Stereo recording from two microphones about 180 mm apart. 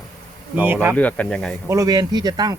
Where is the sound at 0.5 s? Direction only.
10° right (ahead or behind).